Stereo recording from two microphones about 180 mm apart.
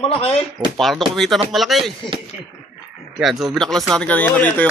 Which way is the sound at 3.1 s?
Centre (ahead or behind).